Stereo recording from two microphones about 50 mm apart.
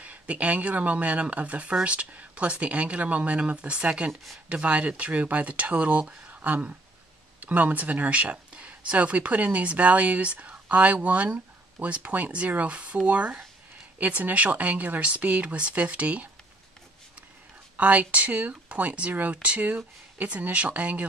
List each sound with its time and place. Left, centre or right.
0.0 s speech: right
4.1 s speech: centre
4.5 s speech: right
17.7 s speech: right